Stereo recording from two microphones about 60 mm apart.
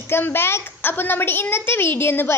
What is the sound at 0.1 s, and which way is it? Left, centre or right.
A child's voice, left.